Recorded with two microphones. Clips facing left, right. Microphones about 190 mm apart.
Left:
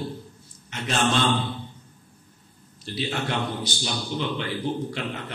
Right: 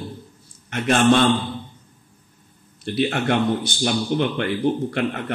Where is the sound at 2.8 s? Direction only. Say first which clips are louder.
Right 8 dB; 55° right (ahead or behind).